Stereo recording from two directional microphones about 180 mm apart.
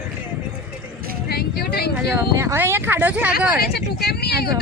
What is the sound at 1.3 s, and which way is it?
Speech, 60° left (ahead or behind).